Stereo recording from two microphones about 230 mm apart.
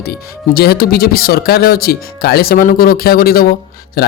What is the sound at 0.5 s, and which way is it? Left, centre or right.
Speech, left.